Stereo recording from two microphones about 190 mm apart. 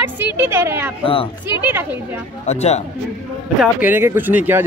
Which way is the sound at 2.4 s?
35° left (ahead or behind).